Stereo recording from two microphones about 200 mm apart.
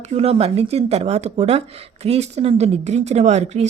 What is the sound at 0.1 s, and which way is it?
Speech, 30° right (ahead or behind).